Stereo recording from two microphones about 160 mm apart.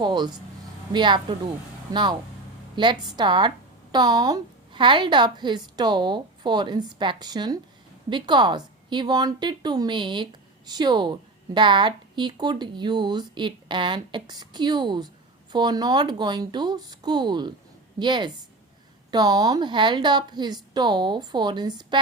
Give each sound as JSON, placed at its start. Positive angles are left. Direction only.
{"t": 0.0, "sound": "a woman's voice", "side_deg": -30}